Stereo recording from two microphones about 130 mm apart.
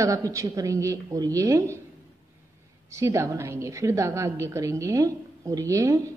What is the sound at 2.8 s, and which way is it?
A woman's voice, 20° right (ahead or behind).